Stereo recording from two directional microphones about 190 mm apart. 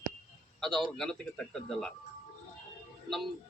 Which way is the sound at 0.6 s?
Centre (ahead or behind).